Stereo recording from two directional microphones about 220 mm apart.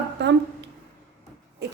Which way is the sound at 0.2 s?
50° right (ahead or behind).